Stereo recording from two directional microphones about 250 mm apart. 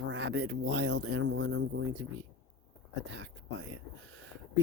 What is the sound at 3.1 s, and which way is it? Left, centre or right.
Speech, right.